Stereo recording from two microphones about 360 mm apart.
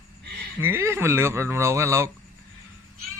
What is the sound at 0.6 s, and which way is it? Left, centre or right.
Speech, centre.